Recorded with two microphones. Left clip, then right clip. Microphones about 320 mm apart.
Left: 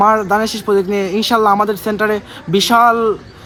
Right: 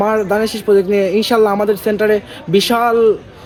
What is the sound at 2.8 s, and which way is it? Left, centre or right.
Speech, centre.